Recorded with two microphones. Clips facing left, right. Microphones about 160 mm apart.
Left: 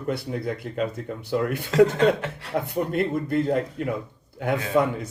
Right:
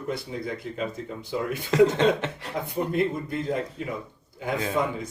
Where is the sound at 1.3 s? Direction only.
65° left (ahead or behind).